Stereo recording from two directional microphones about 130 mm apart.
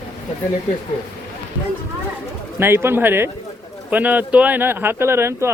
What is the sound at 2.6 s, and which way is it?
Speech, 20° right (ahead or behind).